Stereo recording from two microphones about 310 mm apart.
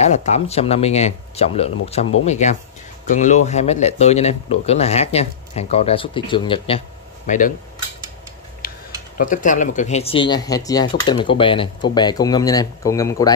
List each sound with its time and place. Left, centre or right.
0.0 s speech: left
8.6 s tick-tock: left
9.2 s speech: left